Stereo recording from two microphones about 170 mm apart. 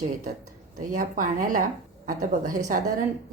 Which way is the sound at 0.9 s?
50° right (ahead or behind).